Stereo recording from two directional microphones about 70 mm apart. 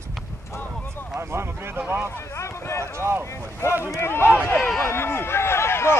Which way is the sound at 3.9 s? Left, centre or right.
Left.